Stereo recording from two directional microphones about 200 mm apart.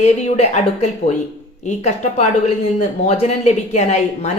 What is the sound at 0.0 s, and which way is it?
Speech, 35° left (ahead or behind).